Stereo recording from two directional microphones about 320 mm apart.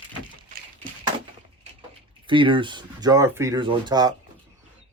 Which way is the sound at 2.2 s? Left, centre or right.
Centre.